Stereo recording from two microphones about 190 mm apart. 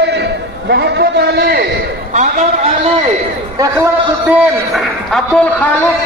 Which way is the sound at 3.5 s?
15° right (ahead or behind).